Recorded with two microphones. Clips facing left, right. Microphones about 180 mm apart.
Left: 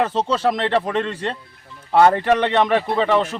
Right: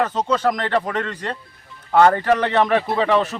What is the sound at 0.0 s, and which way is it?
Speech, 30° left (ahead or behind).